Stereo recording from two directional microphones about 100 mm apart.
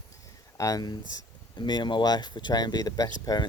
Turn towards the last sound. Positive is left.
turn(degrees=40)  # may be behind; listen again after turning